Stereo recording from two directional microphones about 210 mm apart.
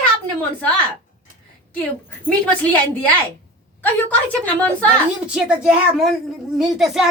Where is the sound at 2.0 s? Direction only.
5° left (ahead or behind).